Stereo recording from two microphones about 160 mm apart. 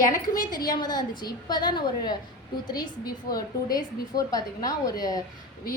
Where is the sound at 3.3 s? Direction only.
25° left (ahead or behind).